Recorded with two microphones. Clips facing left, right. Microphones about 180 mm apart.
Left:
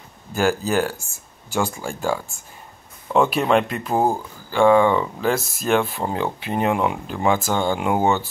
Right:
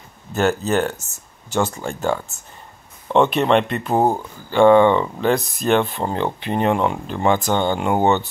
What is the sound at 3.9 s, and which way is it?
Speech, 25° right (ahead or behind).